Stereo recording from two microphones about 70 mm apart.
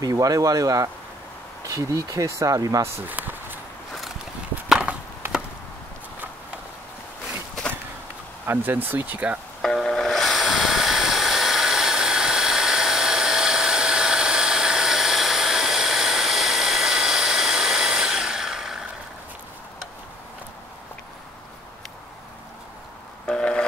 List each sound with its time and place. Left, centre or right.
0.0 s speech: right
3.1 s walk: right
4.6 s wood: centre
8.5 s speech: right
9.6 s a sound: centre
23.2 s busy signal: centre